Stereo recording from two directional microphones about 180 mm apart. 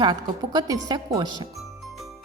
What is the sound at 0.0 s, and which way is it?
Speech, 25° right (ahead or behind).